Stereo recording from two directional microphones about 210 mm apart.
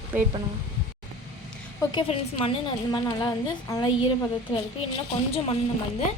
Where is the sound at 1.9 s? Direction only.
25° left (ahead or behind).